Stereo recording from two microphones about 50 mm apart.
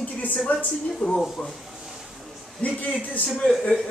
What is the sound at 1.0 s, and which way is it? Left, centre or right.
Speech, left.